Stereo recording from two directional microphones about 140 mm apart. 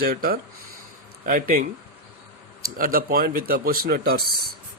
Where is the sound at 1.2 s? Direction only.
80° right.